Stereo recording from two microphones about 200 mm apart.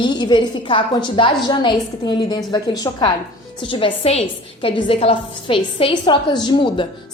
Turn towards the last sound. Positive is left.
turn(degrees=25)  # may be behind; listen again after turning